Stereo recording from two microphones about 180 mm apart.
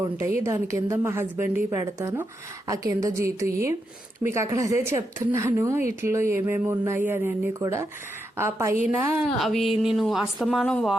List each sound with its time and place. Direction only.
0.4 s speech: 15° right (ahead or behind)
9.4 s a woman's voice: centre (ahead or behind)